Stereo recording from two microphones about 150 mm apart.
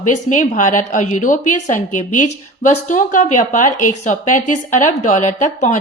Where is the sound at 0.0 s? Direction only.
60° left (ahead or behind).